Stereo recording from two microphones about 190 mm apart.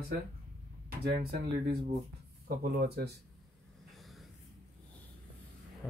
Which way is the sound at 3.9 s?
Centre (ahead or behind).